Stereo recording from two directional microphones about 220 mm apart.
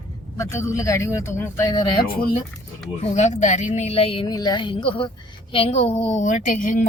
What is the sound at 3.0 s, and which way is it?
Speech, 30° left (ahead or behind).